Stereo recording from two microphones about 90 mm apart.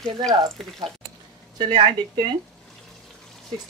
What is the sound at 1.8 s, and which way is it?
Speech, 60° right (ahead or behind).